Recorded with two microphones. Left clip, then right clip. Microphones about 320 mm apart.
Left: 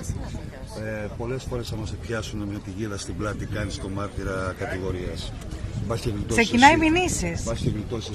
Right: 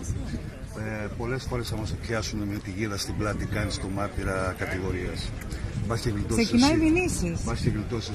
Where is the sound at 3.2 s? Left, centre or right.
Centre.